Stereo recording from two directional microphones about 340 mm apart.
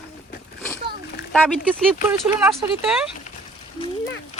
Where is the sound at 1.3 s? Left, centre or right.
Centre.